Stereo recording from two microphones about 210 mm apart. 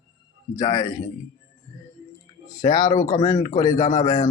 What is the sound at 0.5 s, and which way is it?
Speech, 15° left (ahead or behind).